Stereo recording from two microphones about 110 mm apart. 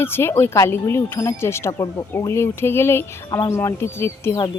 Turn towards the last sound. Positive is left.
turn(degrees=25)  # may be behind; listen again after turning